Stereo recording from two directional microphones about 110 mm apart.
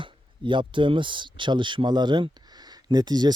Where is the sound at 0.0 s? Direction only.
50° right (ahead or behind).